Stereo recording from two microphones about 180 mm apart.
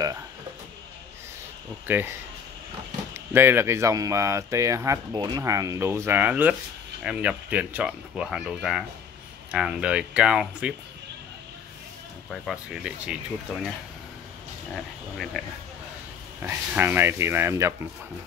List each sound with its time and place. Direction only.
1.9 s speech: 10° right (ahead or behind)
3.3 s speech: 15° right (ahead or behind)
12.3 s speech: centre (ahead or behind)
15.3 s speech: centre (ahead or behind)
16.4 s speech: 10° right (ahead or behind)